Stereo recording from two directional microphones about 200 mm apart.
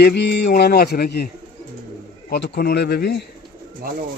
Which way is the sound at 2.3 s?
55° left (ahead or behind).